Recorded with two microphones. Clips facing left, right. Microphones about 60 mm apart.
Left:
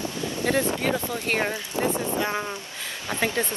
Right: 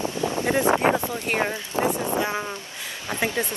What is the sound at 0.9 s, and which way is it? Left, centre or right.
Speech, centre.